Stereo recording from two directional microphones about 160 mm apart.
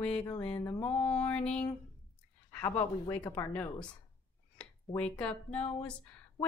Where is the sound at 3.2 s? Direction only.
25° left (ahead or behind).